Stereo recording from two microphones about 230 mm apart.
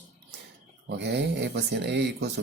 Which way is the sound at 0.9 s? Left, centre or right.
Right.